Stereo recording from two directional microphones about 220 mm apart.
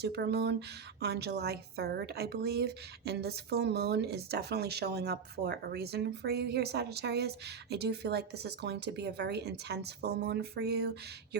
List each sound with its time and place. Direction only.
0.0 s a woman's voice: 50° right (ahead or behind)